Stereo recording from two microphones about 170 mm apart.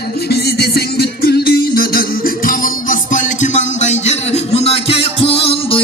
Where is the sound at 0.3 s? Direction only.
70° left (ahead or behind).